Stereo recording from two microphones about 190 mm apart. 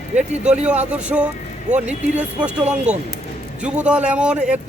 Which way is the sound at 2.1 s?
5° right (ahead or behind).